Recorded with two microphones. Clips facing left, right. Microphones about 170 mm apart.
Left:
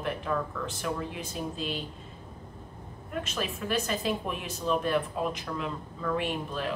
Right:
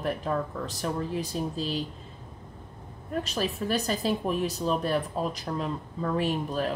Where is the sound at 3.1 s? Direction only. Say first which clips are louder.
Right 4 dB; 35° right (ahead or behind).